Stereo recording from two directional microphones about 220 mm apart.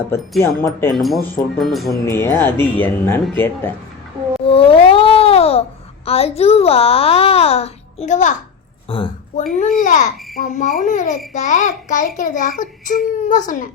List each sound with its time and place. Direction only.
0.4 s speech: 15° left (ahead or behind)
0.9 s speech: centre (ahead or behind)
2.0 s speech: 10° left (ahead or behind)
4.4 s baby cry: 25° left (ahead or behind)
6.1 s a child's voice: 25° left (ahead or behind)
9.4 s a child's voice: 40° left (ahead or behind)